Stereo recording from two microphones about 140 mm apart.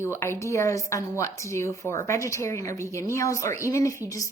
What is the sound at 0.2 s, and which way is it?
A woman's voice, 20° left (ahead or behind).